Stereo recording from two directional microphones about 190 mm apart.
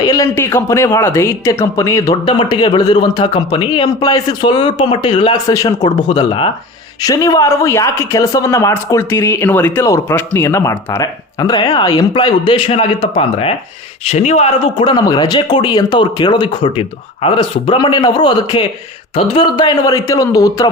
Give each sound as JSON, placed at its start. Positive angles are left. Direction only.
{"t": 0.0, "sound": "a man's voice", "side_deg": 20}